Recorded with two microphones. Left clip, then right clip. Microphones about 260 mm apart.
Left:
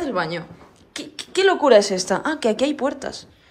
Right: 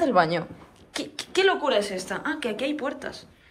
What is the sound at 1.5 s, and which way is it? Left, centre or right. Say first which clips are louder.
A woman's voice: left 14 dB; left.